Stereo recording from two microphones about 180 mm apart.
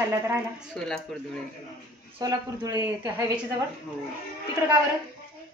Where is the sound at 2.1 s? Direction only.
20° right (ahead or behind).